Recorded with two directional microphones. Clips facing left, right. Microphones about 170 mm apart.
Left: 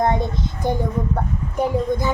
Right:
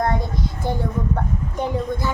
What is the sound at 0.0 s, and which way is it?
A child's voice, 20° left (ahead or behind).